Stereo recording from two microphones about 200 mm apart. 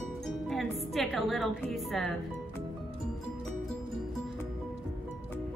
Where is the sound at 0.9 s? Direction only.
Centre (ahead or behind).